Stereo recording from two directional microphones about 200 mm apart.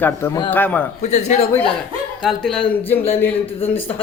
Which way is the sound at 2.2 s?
5° left (ahead or behind).